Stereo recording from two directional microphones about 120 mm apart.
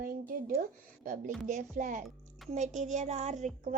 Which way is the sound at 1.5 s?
90° right.